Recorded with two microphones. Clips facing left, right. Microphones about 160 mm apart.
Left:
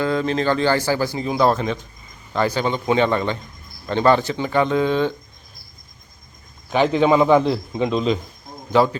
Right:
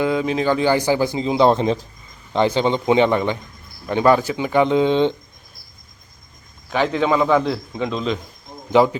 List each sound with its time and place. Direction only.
0.0 s speech: 10° right (ahead or behind); by 1.9 s 30° right (ahead or behind)
2.3 s a man's voice: 20° right (ahead or behind)
6.9 s a man's voice: 20° left (ahead or behind)
8.7 s speech: 15° right (ahead or behind)